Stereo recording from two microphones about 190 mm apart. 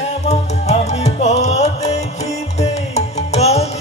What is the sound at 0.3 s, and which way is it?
Music, 35° left (ahead or behind).